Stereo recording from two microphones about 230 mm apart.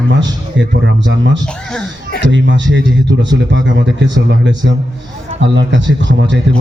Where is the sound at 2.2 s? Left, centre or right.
Right.